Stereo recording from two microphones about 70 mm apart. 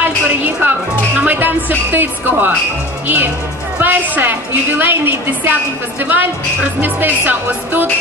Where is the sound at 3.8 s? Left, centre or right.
Right.